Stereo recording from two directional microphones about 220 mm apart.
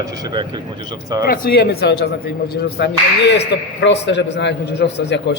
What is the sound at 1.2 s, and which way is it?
A man's voice, 45° left (ahead or behind).